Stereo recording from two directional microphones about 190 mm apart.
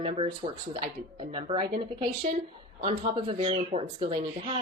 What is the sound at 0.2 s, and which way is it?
Speech, 25° right (ahead or behind).